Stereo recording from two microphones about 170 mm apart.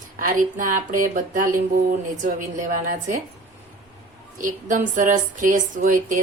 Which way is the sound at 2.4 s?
50° right (ahead or behind).